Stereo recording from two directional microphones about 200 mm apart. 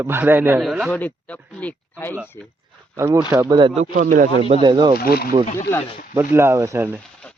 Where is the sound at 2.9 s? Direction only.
15° right (ahead or behind).